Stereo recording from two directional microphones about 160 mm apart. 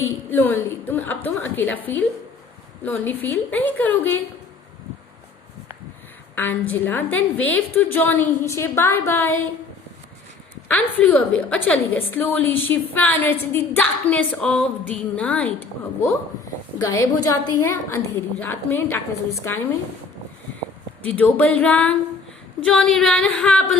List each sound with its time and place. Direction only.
0.3 s a woman's voice: 15° left (ahead or behind)
6.3 s a woman's voice: 10° left (ahead or behind)
10.7 s a woman's voice: 10° left (ahead or behind)
16.8 s a woman's voice: 20° left (ahead or behind)
21.0 s a woman's voice: 10° left (ahead or behind)